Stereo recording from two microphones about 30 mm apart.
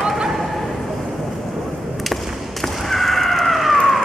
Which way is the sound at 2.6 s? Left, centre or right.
Centre.